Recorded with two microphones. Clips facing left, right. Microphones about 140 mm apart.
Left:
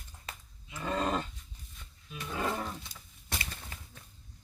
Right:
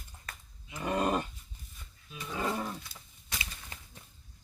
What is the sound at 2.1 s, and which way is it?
Roaring cats, centre (ahead or behind).